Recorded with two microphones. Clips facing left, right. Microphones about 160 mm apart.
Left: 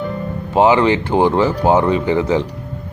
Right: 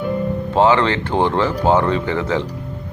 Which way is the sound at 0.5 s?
10° left (ahead or behind).